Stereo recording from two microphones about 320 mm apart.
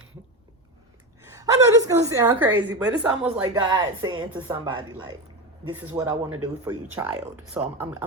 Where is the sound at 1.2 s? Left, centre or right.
Centre.